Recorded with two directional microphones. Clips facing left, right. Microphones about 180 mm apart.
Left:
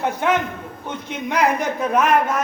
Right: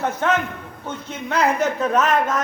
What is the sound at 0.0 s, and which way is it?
A man's voice, 15° left (ahead or behind).